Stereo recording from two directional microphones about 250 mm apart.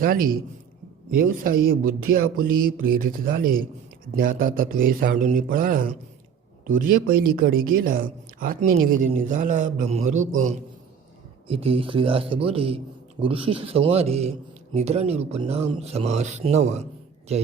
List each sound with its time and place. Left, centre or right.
0.0 s a man's voice: right